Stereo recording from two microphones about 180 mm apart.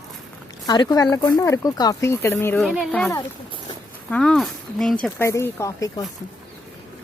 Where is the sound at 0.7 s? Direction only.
20° left (ahead or behind).